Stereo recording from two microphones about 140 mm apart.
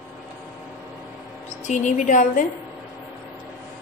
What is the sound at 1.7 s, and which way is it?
Speech, 60° left (ahead or behind).